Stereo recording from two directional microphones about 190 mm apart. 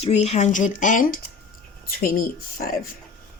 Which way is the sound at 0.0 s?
35° left (ahead or behind).